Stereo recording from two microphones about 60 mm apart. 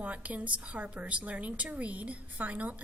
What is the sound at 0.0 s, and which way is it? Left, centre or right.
A woman's voice, right.